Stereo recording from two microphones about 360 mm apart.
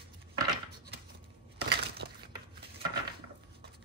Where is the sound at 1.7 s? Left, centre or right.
Right.